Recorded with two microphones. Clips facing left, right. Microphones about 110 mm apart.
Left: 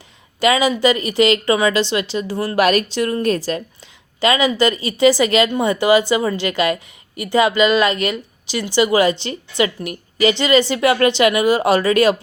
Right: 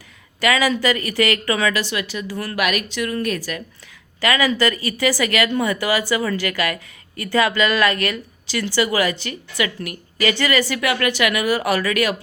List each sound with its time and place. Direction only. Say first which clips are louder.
0.3 s speech: left 3 dB; 20° left (ahead or behind)